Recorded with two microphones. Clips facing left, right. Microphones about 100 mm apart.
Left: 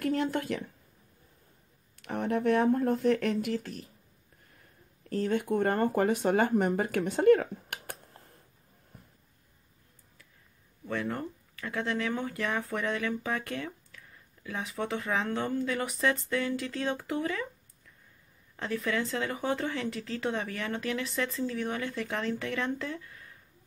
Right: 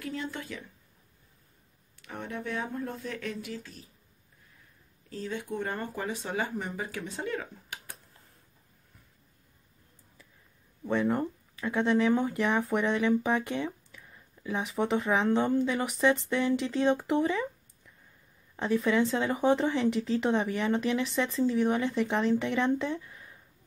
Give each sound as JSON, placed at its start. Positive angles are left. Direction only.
{"t": 0.0, "sound": "speech", "side_deg": 60}
{"t": 2.0, "sound": "speech", "side_deg": 55}
{"t": 5.1, "sound": "speech", "side_deg": 55}
{"t": 10.9, "sound": "speech", "side_deg": -20}
{"t": 18.6, "sound": "speech", "side_deg": -20}